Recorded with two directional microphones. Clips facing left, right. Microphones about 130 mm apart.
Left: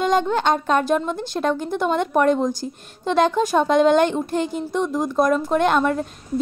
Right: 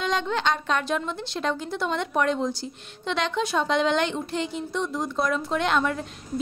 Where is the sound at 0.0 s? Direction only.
45° left (ahead or behind).